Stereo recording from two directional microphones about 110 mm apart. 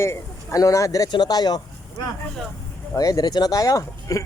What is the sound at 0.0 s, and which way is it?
A man's voice, 25° left (ahead or behind).